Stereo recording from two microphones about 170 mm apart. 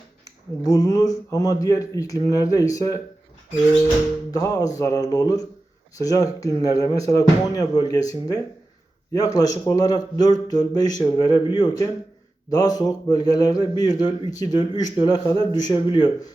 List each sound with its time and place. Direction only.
0.6 s speech: 20° left (ahead or behind)
4.3 s speech: 20° left (ahead or behind)